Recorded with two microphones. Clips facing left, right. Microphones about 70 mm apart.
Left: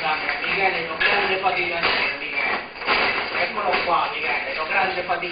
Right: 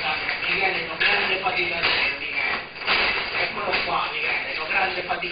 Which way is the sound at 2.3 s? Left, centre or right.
Centre.